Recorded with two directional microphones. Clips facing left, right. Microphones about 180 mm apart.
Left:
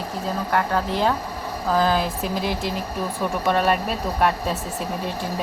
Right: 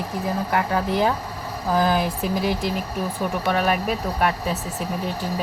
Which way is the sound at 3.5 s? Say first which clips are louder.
Left 2 dB; 5° right (ahead or behind).